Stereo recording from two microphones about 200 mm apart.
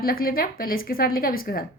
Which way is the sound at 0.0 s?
50° left (ahead or behind).